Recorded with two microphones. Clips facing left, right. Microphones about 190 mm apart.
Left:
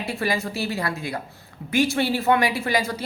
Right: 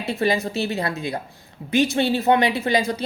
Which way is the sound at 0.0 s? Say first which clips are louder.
Right 4 dB; 20° right (ahead or behind).